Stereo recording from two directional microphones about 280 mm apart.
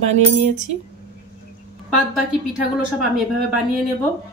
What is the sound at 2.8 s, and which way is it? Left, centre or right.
Speech, centre.